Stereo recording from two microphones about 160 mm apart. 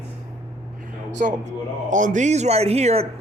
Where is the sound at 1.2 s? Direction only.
55° right (ahead or behind).